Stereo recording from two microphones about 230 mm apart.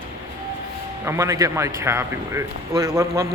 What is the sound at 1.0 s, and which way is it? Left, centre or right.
Speech, centre.